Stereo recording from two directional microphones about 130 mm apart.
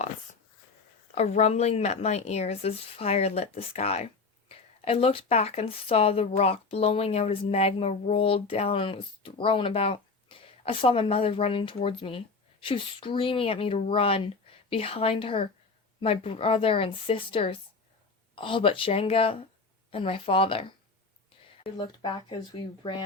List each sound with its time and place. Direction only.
1.1 s speech: 55° left (ahead or behind); by 23.0 s 40° left (ahead or behind)